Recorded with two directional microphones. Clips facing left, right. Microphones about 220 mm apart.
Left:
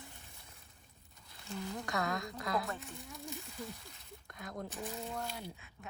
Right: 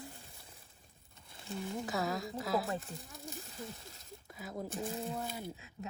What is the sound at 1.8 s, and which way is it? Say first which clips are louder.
Speech: even; 5° right (ahead or behind).